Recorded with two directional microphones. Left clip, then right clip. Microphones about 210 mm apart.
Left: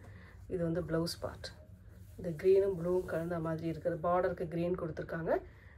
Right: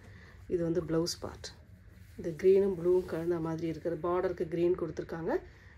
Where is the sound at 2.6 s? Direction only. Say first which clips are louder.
Right 4 dB; 30° right (ahead or behind).